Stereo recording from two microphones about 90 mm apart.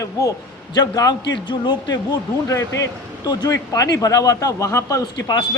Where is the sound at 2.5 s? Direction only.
35° left (ahead or behind).